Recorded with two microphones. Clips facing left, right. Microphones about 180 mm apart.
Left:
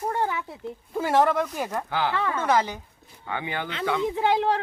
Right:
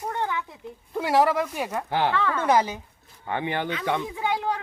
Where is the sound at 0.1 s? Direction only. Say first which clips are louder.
Left 1 dB; 20° left (ahead or behind).